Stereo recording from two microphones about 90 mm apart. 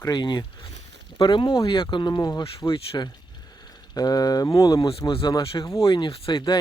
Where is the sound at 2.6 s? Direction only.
25° left (ahead or behind).